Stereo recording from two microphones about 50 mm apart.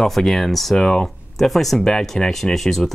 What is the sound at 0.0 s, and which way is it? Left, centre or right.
Speech, centre.